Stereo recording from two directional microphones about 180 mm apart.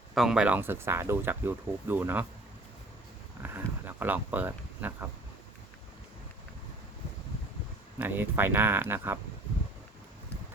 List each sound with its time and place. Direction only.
0.1 s speech: 5° right (ahead or behind)
3.4 s speech: 10° right (ahead or behind)
7.9 s speech: 10° right (ahead or behind)